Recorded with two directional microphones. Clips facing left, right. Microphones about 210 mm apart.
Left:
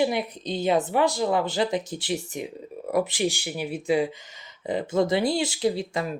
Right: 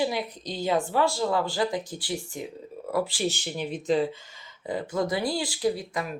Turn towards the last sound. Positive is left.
turn(degrees=30)  # may be behind; listen again after turning